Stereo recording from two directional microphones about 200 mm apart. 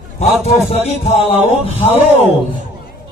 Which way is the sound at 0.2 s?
30° left (ahead or behind).